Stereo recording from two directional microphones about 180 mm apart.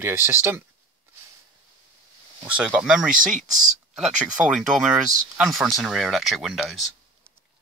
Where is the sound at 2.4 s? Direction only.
5° right (ahead or behind).